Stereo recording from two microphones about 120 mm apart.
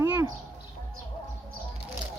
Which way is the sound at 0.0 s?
25° right (ahead or behind).